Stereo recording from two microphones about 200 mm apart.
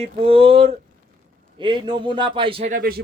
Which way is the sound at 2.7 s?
45° right (ahead or behind).